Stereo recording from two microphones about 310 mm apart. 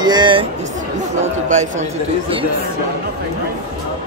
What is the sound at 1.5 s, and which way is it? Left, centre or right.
Speech, right.